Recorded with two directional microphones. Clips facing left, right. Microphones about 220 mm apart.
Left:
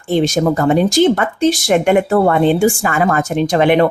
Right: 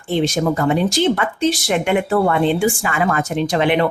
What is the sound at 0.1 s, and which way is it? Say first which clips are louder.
Speech: left 4 dB; 45° left (ahead or behind).